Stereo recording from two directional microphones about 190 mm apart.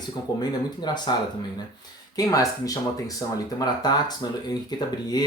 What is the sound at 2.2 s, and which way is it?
Speech, 20° left (ahead or behind).